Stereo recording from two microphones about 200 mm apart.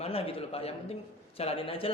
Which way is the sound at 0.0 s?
30° left (ahead or behind).